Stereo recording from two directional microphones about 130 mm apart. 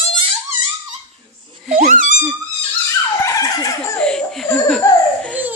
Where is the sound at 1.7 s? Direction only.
90° right.